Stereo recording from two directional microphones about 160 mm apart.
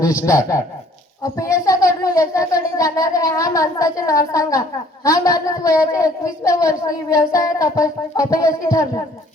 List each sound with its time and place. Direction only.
0.3 s a woman's voice: 20° left (ahead or behind)